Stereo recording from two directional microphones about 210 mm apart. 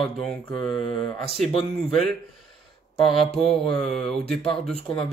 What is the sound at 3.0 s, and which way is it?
Speech, centre (ahead or behind).